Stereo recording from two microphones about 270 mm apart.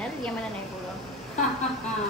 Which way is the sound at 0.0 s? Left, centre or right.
Centre.